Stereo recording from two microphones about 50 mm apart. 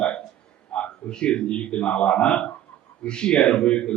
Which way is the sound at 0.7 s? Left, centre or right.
Left.